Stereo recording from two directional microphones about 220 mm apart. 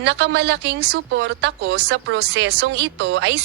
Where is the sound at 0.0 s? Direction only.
50° right (ahead or behind).